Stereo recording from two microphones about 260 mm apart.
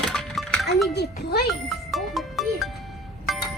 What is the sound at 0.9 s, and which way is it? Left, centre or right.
Music, left.